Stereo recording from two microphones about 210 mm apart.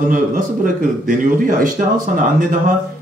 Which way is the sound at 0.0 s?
40° right (ahead or behind).